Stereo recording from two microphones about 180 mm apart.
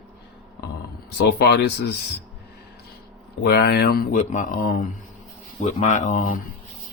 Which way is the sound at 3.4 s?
65° left (ahead or behind).